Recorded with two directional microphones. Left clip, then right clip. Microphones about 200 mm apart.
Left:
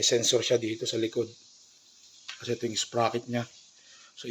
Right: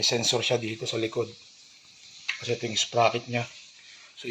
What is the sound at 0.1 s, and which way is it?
Speech, 25° left (ahead or behind).